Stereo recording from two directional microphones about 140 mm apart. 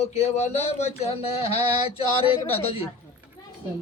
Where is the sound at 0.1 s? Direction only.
50° left (ahead or behind).